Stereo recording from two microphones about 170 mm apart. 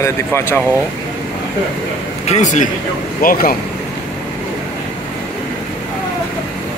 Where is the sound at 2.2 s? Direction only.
45° left (ahead or behind).